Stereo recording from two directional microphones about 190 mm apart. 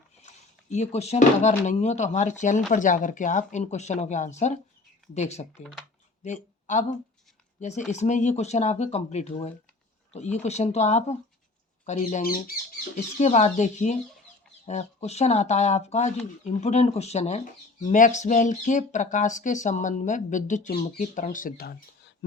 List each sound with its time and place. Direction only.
0.7 s speech: 35° left (ahead or behind)
7.9 s speech: 40° left (ahead or behind); by 22.1 s 55° left (ahead or behind)